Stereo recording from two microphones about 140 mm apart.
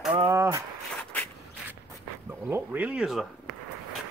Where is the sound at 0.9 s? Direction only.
10° left (ahead or behind).